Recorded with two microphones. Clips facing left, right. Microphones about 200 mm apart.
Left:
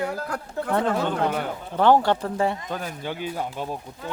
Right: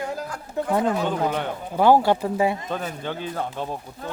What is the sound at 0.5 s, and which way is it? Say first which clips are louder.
Speech: right 2 dB; 15° right (ahead or behind).